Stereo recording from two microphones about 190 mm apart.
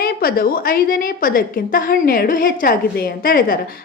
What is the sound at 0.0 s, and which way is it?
A woman's voice, 50° left (ahead or behind).